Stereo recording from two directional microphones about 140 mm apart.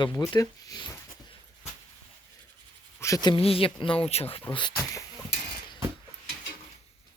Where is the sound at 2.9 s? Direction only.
20° left (ahead or behind).